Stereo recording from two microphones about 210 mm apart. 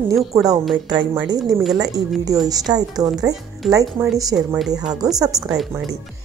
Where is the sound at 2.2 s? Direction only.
15° right (ahead or behind).